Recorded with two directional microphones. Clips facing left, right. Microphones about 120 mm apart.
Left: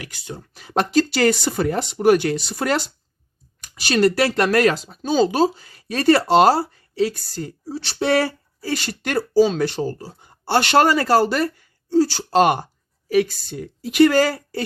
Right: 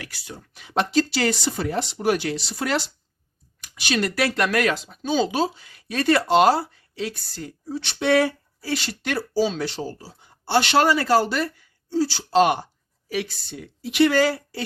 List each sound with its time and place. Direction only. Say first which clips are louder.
0.0 s speech: left 4 dB; 20° left (ahead or behind); by 14.6 s 45° left (ahead or behind)